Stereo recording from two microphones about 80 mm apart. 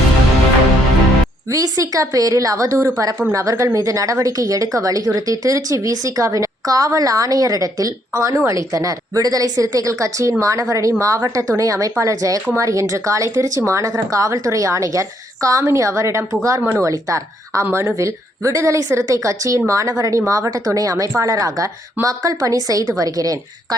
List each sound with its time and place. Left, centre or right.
1.5 s a woman's voice: right